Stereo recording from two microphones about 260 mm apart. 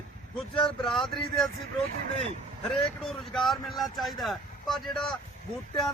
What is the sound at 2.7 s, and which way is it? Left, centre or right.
Speech, centre.